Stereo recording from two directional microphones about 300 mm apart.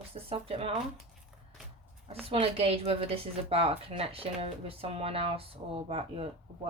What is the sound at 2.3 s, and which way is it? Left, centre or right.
Speech, centre.